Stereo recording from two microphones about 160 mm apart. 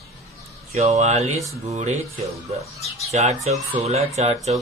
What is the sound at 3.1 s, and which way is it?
Speech, 45° right (ahead or behind).